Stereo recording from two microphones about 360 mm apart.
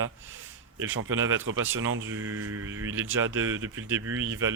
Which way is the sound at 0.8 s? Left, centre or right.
Right.